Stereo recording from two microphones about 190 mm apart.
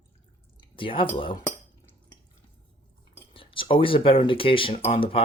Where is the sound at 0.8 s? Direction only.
30° left (ahead or behind).